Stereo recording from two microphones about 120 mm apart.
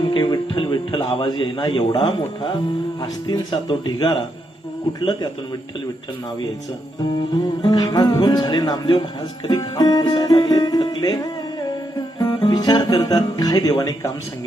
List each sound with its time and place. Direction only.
0.1 s a man's voice: 40° left (ahead or behind)
3.0 s music: 40° left (ahead or behind)
7.6 s music: 35° left (ahead or behind)